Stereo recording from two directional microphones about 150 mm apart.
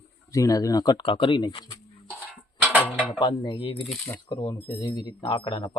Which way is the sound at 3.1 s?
30° left (ahead or behind).